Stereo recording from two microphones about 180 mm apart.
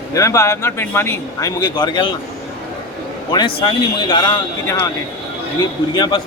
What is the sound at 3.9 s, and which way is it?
Speech, 25° left (ahead or behind).